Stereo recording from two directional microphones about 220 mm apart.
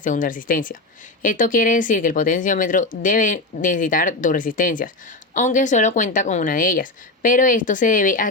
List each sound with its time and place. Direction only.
0.0 s speech: 35° left (ahead or behind)